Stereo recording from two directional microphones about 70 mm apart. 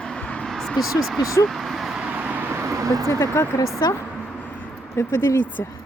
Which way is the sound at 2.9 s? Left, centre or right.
Right.